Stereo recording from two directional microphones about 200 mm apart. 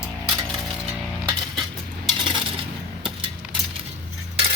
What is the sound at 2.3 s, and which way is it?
Coin, 25° right (ahead or behind).